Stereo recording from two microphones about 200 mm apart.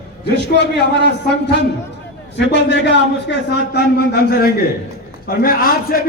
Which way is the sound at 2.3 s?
60° left (ahead or behind).